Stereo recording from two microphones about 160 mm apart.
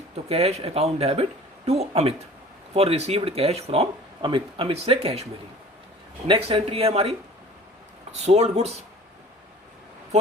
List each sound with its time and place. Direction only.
0.3 s speech: 40° right (ahead or behind)
6.2 s speech: 35° right (ahead or behind)
8.2 s speech: 40° right (ahead or behind)